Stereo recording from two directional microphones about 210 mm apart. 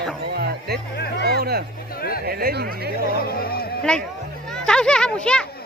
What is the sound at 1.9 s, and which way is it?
Speech, 45° left (ahead or behind).